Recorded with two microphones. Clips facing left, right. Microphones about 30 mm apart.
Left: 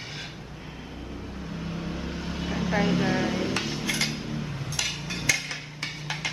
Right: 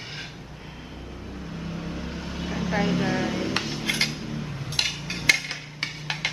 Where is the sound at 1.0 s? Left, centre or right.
Centre.